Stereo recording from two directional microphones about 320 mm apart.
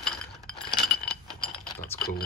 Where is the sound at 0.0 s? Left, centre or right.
Centre.